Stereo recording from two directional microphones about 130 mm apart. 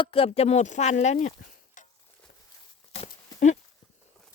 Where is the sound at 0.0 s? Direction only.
45° left (ahead or behind); by 1.9 s 75° left (ahead or behind).